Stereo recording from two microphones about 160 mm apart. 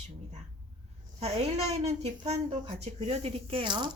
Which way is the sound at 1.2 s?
40° right (ahead or behind).